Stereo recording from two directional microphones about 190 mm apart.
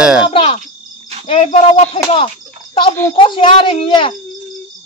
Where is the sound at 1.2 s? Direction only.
35° left (ahead or behind).